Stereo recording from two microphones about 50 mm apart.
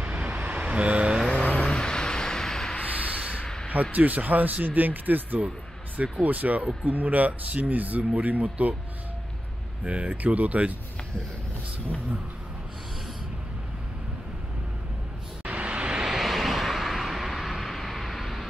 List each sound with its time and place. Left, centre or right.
0.0 s vehicle: right
1.3 s vehicle: left
2.9 s a sound: right
3.9 s speech: right
9.8 s speech: right
15.4 s vehicle: right
16.1 s vehicle: centre